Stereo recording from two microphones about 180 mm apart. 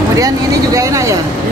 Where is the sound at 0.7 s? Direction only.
15° right (ahead or behind).